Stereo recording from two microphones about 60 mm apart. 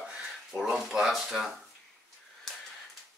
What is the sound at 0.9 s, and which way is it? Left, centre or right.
Speech, centre.